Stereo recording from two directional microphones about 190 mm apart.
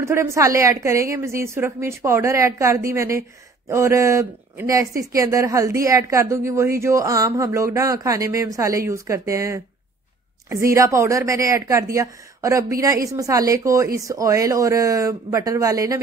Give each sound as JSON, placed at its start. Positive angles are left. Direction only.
{"t": 0.0, "sound": "speech", "side_deg": -15}